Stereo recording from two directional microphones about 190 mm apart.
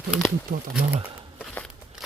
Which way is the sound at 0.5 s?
45° right (ahead or behind).